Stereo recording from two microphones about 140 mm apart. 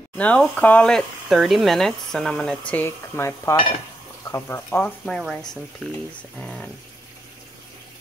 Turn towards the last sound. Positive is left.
turn(degrees=5)  # may be behind; listen again after turning